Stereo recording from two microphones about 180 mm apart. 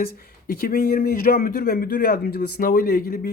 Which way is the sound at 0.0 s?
55° left (ahead or behind).